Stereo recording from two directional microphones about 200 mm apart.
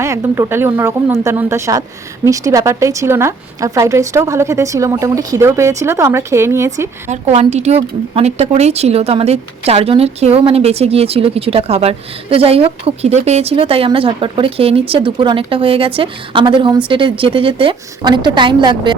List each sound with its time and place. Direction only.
0.0 s a woman's voice: 15° right (ahead or behind)
7.1 s a woman's voice: 35° right (ahead or behind)